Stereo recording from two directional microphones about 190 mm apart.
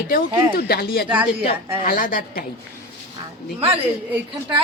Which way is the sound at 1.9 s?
45° left (ahead or behind).